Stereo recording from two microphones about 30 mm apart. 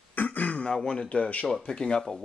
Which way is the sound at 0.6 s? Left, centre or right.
Left.